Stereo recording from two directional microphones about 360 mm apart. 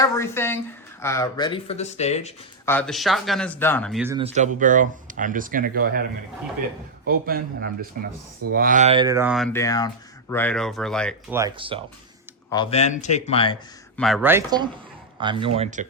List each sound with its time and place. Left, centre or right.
0.0 s speech: centre
2.6 s speech: centre
4.2 s speech: centre
7.1 s speech: right; by 11.3 s centre
11.3 s speech: centre
12.5 s speech: centre
13.9 s speech: centre